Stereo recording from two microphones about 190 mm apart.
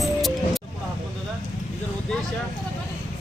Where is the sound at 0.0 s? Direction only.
Centre (ahead or behind).